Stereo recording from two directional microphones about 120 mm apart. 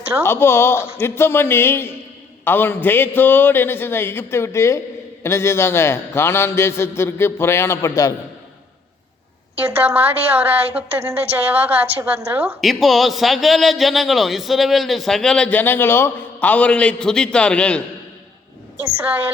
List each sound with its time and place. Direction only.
0.2 s a man's voice: 20° left (ahead or behind)
9.6 s a woman's voice: 10° right (ahead or behind); by 17.8 s 10° left (ahead or behind)
19.0 s speech: 15° right (ahead or behind)